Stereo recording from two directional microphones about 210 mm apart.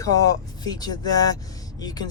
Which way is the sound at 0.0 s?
15° left (ahead or behind).